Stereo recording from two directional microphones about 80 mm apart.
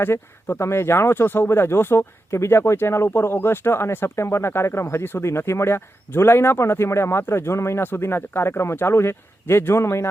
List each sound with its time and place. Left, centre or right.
0.0 s speech: left